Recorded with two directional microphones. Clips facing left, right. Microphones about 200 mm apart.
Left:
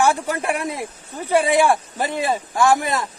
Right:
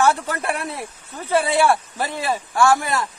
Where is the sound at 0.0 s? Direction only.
15° left (ahead or behind).